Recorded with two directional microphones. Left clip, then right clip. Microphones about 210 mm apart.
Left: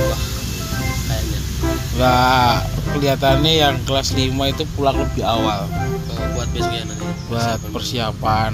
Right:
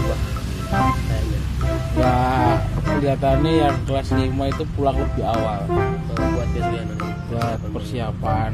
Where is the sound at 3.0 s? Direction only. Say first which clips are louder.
Left 5 dB; 20° left (ahead or behind).